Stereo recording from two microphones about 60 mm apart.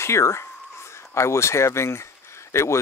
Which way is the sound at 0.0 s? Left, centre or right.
Left.